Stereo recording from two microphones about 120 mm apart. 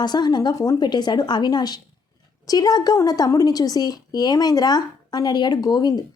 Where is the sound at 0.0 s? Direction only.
35° left (ahead or behind).